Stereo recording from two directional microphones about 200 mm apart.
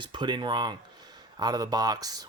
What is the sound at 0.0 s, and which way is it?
Speech, 25° right (ahead or behind).